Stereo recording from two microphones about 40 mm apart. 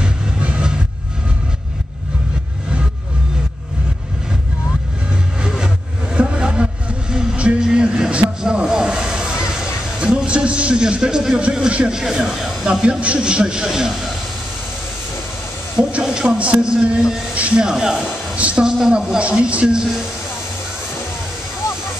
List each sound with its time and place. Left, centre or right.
0.0 s train: right
5.4 s vehicle: centre
8.4 s hiss: centre
11.9 s speech: centre
12.8 s speech: right
15.8 s speech: right
17.3 s speech: right
17.6 s speech: centre